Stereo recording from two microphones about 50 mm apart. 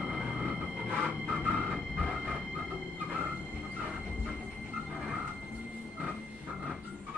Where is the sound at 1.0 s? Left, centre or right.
Centre.